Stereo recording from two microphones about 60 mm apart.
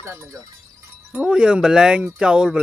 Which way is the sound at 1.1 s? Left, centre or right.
Centre.